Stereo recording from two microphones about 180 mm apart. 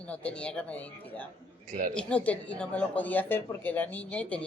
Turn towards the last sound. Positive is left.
turn(degrees=5)  # may be behind; listen again after turning